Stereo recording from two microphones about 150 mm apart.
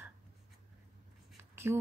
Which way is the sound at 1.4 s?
15° right (ahead or behind).